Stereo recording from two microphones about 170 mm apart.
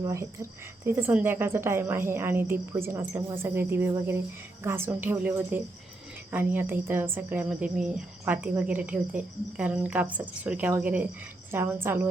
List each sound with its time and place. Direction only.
0.0 s a woman's voice: 15° right (ahead or behind)